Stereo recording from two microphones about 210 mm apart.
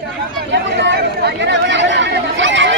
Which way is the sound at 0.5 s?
55° right (ahead or behind).